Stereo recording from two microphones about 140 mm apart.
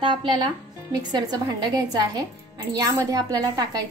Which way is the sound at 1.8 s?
30° right (ahead or behind).